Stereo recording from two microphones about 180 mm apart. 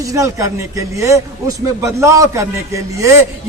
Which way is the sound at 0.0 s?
20° right (ahead or behind).